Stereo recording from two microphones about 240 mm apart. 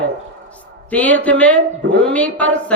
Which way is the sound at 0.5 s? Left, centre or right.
Centre.